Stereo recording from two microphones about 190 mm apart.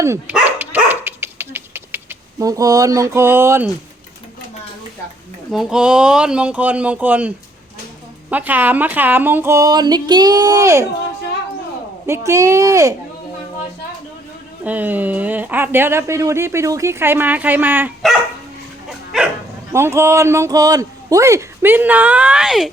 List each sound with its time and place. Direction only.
0.0 s dog: 10° right (ahead or behind)
5.5 s speech: centre (ahead or behind)
12.0 s speech: 15° right (ahead or behind)
14.6 s speech: 10° right (ahead or behind)
18.9 s dog: 5° right (ahead or behind)
19.7 s speech: 15° right (ahead or behind)